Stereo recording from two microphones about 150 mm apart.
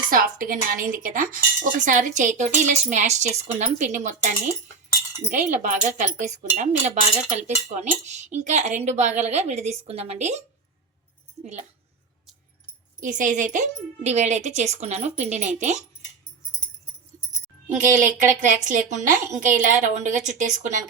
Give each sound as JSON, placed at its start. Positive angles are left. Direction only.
{"t": 0.1, "sound": "a sound", "side_deg": -70}
{"t": 1.0, "sound": "speech", "side_deg": -65}
{"t": 13.0, "sound": "speech", "side_deg": -60}
{"t": 17.8, "sound": "speech", "side_deg": -60}